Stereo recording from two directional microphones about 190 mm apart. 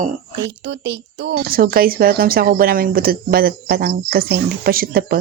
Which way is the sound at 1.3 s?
55° right (ahead or behind).